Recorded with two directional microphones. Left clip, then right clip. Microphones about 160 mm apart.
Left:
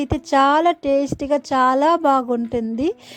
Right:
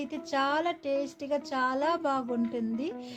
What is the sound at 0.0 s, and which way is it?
A woman's voice, 55° left (ahead or behind).